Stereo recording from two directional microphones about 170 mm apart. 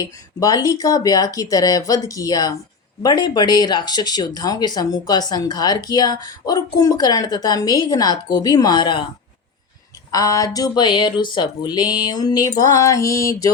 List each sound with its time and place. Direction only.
0.0 s speech: 20° left (ahead or behind)
10.1 s speech: 20° left (ahead or behind)